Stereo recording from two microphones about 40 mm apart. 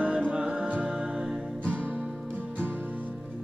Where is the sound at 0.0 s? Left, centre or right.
Right.